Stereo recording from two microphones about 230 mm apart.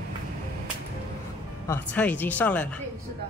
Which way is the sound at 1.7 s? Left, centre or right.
Centre.